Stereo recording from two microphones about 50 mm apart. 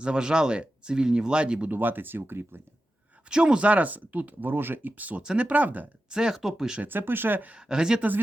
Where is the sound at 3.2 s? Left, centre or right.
Centre.